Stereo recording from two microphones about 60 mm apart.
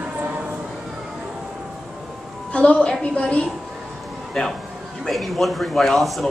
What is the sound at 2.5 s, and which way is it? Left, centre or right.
Speech, centre.